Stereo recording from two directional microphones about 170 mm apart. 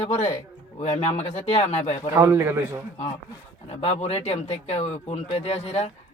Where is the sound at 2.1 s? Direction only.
15° right (ahead or behind).